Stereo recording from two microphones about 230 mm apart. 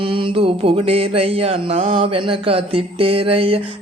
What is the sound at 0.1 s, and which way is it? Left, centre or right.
Mantra, right.